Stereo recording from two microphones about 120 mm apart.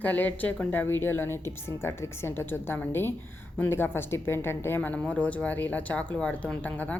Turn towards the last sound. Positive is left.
turn(degrees=10)  # may be behind; listen again after turning